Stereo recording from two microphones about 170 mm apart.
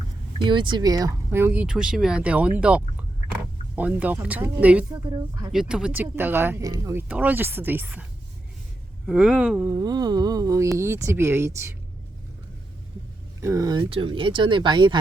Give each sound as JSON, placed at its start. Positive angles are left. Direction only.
{"t": 0.3, "sound": "speech", "side_deg": -25}
{"t": 4.9, "sound": "speech", "side_deg": -25}
{"t": 5.5, "sound": "speech", "side_deg": -5}
{"t": 9.0, "sound": "speech", "side_deg": -5}
{"t": 9.7, "sound": "speech", "side_deg": -25}
{"t": 13.4, "sound": "speech", "side_deg": -20}